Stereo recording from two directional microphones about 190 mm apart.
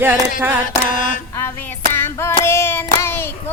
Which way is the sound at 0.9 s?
40° left (ahead or behind).